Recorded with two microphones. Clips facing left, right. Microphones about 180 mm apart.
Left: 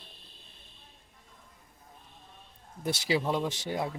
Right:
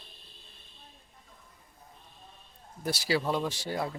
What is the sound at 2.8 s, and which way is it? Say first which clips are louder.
Speech: even; 20° left (ahead or behind).